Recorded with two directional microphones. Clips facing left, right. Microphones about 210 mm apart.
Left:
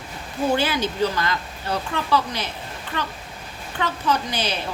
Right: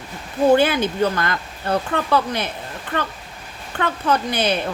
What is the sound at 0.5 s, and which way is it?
Speech, 55° right (ahead or behind).